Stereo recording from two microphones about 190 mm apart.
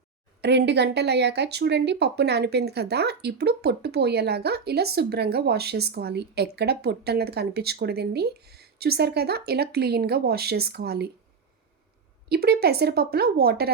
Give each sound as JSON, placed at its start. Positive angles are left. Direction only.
{"t": 0.4, "sound": "speech", "side_deg": -65}
{"t": 12.3, "sound": "speech", "side_deg": -55}